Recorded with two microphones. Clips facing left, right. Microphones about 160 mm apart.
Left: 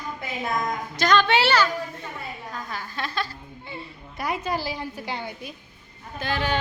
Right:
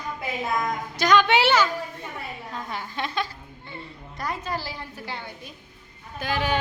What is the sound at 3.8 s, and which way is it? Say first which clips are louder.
A woman's voice: left 1 dB; 10° left (ahead or behind).